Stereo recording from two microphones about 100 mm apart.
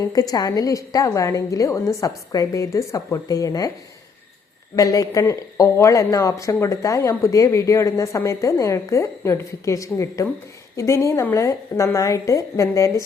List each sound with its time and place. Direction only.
0.0 s speech: 40° left (ahead or behind)
4.7 s speech: 35° left (ahead or behind)